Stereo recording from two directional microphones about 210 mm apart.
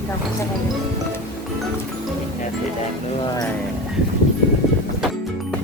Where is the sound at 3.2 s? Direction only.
20° left (ahead or behind).